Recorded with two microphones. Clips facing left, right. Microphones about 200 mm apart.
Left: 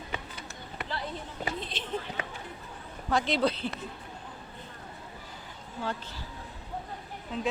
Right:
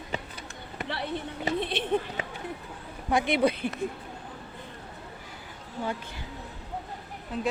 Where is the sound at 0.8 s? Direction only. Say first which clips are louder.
Right 4 dB; 70° right (ahead or behind).